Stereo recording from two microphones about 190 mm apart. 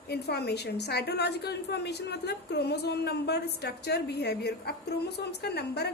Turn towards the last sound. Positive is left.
turn(degrees=60)  # may be behind; listen again after turning